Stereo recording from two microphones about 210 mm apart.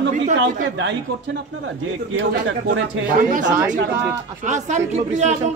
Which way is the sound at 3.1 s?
40° right (ahead or behind).